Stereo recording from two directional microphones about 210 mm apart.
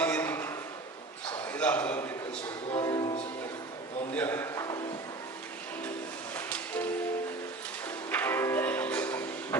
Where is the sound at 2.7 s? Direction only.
20° left (ahead or behind).